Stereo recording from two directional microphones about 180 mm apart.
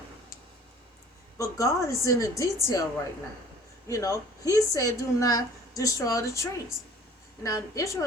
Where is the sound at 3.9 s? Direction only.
15° left (ahead or behind).